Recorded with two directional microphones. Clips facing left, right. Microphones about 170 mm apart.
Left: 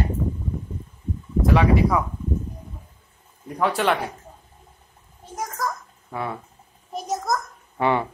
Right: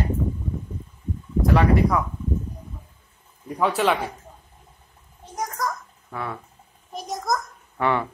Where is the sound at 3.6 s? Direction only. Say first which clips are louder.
Even; centre (ahead or behind).